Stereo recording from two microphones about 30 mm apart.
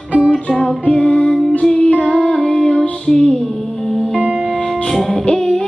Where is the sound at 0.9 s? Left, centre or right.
Left.